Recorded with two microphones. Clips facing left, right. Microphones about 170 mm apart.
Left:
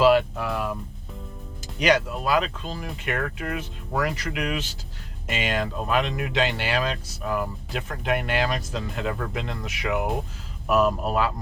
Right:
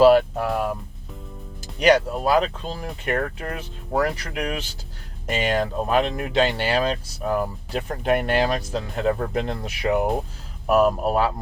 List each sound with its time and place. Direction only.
0.0 s speech: 40° right (ahead or behind)
1.9 s speech: 35° right (ahead or behind)